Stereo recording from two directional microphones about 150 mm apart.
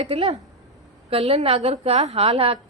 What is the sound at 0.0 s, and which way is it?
A woman's voice, 45° right (ahead or behind).